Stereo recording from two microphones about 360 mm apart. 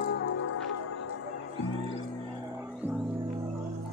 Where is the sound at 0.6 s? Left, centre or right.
Left.